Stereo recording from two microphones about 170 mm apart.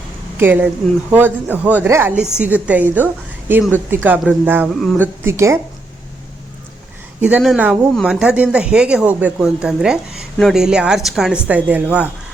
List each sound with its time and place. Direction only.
0.3 s a woman's voice: 10° right (ahead or behind)
4.7 s speech: centre (ahead or behind)
4.9 s a woman's voice: 15° right (ahead or behind)
7.2 s speech: 10° right (ahead or behind)